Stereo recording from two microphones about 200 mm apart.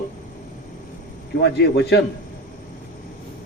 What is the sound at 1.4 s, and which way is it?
Speech, 55° left (ahead or behind).